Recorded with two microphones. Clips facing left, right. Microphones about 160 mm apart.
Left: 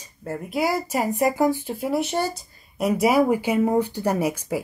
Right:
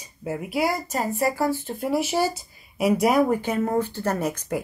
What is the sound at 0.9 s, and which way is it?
Speech, 15° left (ahead or behind).